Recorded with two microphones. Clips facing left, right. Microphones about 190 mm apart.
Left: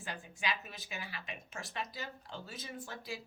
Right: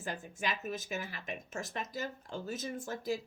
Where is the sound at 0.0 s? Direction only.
45° right (ahead or behind).